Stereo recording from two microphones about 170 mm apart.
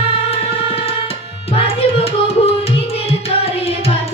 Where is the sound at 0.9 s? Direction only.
35° left (ahead or behind).